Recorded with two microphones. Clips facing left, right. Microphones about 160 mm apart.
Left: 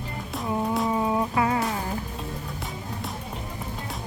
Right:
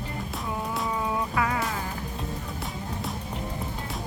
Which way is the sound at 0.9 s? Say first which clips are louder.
Left 4 dB; 25° left (ahead or behind).